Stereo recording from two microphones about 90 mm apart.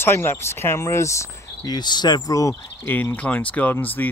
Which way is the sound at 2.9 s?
20° left (ahead or behind).